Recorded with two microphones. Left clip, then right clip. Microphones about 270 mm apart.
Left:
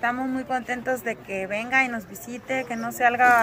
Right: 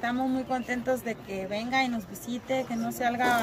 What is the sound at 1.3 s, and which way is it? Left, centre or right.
Speech, centre.